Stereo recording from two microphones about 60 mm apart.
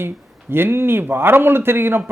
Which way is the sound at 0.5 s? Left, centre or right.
Right.